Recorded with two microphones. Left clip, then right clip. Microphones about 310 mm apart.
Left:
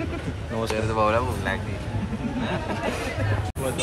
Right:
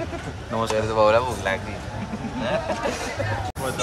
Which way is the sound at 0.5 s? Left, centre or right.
Right.